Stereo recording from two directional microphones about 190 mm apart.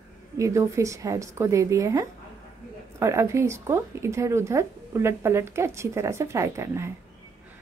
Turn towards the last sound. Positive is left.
turn(degrees=-15)  # may be behind; listen again after turning